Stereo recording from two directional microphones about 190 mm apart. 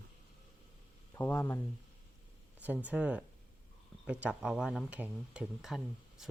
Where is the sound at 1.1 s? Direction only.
10° left (ahead or behind).